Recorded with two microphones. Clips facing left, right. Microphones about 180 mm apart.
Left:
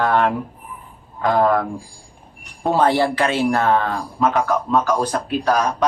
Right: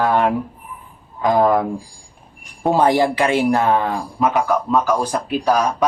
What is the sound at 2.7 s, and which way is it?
A man's voice, 15° right (ahead or behind).